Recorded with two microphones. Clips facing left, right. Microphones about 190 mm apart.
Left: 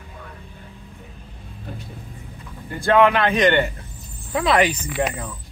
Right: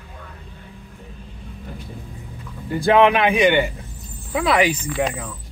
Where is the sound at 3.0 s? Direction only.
15° right (ahead or behind).